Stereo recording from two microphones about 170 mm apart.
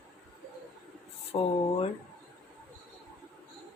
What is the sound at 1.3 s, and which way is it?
Speech, 30° left (ahead or behind).